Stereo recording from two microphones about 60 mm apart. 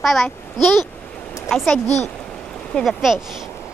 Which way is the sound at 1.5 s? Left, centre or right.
Centre.